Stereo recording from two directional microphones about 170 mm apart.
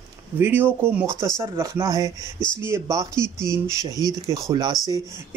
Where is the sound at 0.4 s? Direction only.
10° right (ahead or behind).